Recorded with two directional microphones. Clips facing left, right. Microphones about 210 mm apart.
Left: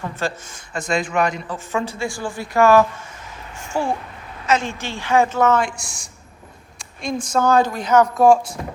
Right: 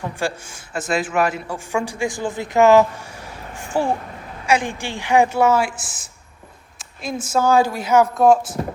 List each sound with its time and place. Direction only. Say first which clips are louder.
0.0 s speech: right 1 dB; 10° right (ahead or behind)
3.6 s a sound: right 2 dB; 15° right (ahead or behind)
4.4 s speech: right 1 dB; 15° right (ahead or behind)